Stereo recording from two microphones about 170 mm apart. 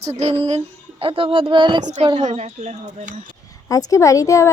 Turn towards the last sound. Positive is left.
turn(degrees=20)  # may be behind; listen again after turning